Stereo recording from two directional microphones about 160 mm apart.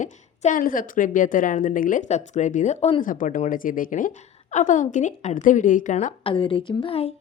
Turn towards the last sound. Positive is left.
turn(degrees=35)  # may be behind; listen again after turning